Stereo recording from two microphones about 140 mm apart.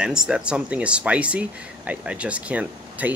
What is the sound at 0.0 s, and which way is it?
Speech, 5° right (ahead or behind).